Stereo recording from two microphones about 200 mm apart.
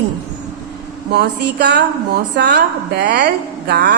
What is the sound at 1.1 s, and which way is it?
A woman's voice, 55° right (ahead or behind).